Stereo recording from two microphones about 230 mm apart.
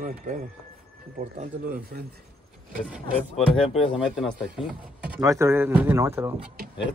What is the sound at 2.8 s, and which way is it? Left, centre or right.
Speech, centre.